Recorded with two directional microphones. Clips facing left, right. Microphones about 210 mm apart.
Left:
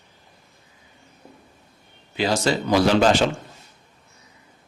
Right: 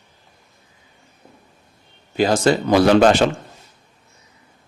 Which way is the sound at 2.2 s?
50° right (ahead or behind).